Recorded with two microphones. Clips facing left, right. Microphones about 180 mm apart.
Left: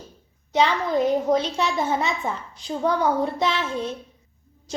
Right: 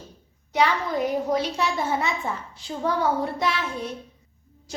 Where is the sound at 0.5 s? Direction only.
25° left (ahead or behind).